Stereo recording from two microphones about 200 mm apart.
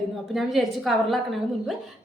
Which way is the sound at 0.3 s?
Centre (ahead or behind).